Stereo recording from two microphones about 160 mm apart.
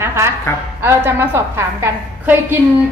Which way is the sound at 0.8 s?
15° right (ahead or behind).